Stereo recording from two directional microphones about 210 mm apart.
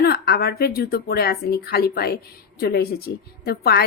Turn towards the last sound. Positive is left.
turn(degrees=50)  # may be behind; listen again after turning